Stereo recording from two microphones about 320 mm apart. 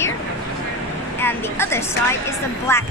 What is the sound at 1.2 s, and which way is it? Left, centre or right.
Speech, centre.